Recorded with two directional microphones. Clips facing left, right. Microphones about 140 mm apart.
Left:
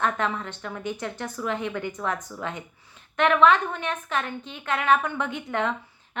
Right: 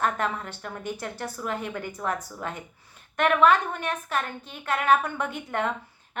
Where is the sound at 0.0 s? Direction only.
40° right (ahead or behind).